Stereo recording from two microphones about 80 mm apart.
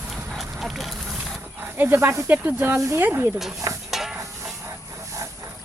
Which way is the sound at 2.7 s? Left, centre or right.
Right.